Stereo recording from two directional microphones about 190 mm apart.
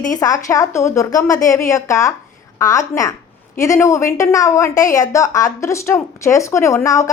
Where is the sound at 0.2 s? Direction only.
20° left (ahead or behind).